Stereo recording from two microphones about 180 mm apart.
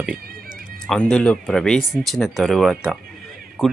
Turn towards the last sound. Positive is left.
turn(degrees=-5)  # may be behind; listen again after turning